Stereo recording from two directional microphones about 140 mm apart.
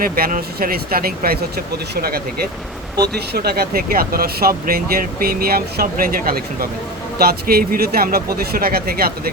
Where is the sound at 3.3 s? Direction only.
90° right.